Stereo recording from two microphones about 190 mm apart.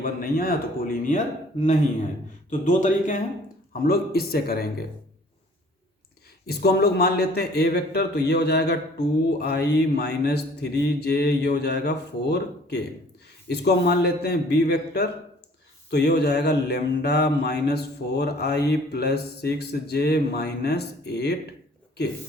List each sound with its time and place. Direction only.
0.0 s a man's voice: 50° left (ahead or behind)
3.7 s a man's voice: 55° left (ahead or behind)
6.4 s a man's voice: 55° left (ahead or behind)